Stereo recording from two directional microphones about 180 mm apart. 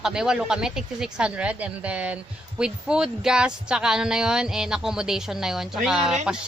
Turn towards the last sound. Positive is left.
turn(degrees=0)  # may be behind; listen again after turning